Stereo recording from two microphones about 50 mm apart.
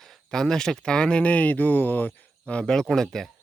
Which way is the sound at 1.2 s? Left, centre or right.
Left.